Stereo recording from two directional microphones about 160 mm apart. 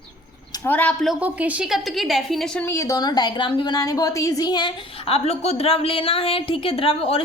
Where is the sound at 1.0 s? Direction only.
10° right (ahead or behind).